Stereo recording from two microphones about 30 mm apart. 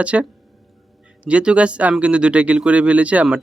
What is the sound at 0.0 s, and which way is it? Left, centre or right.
Speech, right.